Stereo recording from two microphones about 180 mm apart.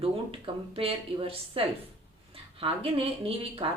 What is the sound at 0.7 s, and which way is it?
Speech, 30° right (ahead or behind).